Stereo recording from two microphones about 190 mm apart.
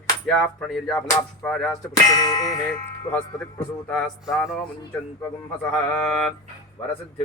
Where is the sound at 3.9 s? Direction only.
Centre (ahead or behind).